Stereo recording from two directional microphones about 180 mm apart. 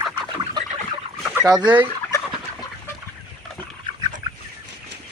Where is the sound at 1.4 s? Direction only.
25° right (ahead or behind).